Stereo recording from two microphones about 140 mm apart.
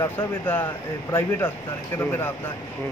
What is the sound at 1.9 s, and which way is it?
Speech, 15° left (ahead or behind).